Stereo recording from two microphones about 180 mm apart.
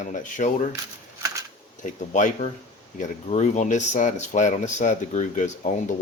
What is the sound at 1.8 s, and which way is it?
Speech, 45° left (ahead or behind).